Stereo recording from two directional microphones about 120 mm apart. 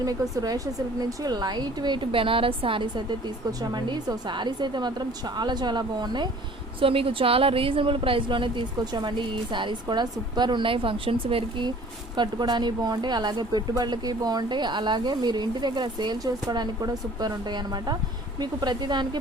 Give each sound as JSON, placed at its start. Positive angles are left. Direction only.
{"t": 0.0, "sound": "speech", "side_deg": -30}
{"t": 6.7, "sound": "speech", "side_deg": -50}
{"t": 12.1, "sound": "speech", "side_deg": -40}